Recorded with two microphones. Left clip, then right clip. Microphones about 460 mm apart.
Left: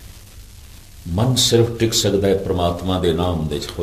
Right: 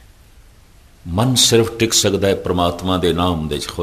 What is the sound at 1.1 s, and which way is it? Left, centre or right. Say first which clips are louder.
Speech: right 3 dB; right.